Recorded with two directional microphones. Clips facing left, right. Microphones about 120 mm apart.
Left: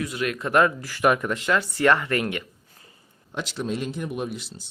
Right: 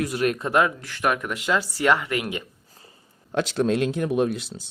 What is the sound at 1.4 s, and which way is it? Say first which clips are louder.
Speech: left 1 dB; 15° right (ahead or behind).